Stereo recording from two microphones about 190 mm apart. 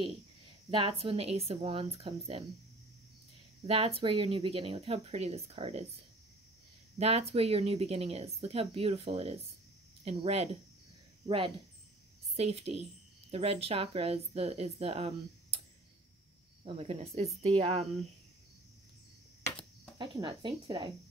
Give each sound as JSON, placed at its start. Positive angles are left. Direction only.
{"t": 0.7, "sound": "speech", "side_deg": -25}
{"t": 3.6, "sound": "speech", "side_deg": -30}
{"t": 7.0, "sound": "speech", "side_deg": -35}
{"t": 16.6, "sound": "speech", "side_deg": -30}
{"t": 20.0, "sound": "speech", "side_deg": -25}